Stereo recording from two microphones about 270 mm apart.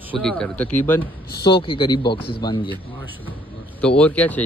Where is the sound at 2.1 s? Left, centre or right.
Left.